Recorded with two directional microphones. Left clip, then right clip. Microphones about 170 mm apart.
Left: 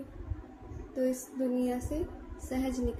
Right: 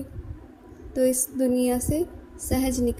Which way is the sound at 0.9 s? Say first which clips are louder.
Right 9 dB; 55° right (ahead or behind).